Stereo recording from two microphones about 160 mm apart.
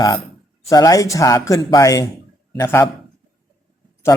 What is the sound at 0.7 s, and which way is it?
Speech, 20° left (ahead or behind).